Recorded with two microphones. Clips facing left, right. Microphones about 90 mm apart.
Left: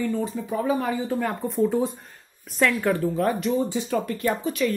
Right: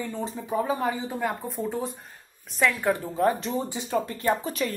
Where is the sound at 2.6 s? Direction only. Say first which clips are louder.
Left 2 dB; 10° right (ahead or behind).